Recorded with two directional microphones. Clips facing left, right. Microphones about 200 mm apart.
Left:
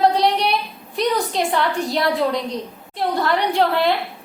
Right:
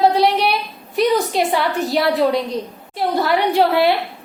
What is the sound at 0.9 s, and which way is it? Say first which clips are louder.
A woman's voice: right 4 dB; 5° right (ahead or behind).